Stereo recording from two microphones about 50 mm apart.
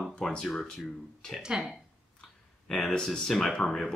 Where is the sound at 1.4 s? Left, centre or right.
Centre.